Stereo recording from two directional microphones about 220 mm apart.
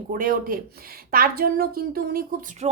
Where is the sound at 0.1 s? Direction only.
40° right (ahead or behind).